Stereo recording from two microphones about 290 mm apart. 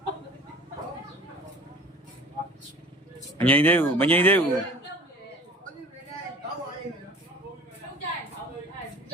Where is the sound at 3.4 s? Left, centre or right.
Centre.